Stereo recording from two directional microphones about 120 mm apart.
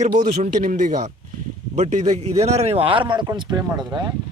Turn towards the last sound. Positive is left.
turn(degrees=-35)  # may be behind; listen again after turning